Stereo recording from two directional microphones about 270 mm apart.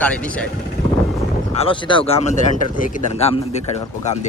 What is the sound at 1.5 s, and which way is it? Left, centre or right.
Speech, centre.